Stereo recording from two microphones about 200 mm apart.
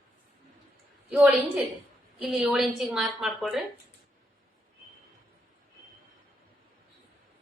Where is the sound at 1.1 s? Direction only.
5° right (ahead or behind).